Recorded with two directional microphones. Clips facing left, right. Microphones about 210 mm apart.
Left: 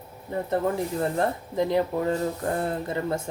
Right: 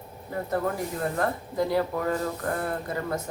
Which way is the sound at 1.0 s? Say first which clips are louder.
Left 2 dB; 25° left (ahead or behind).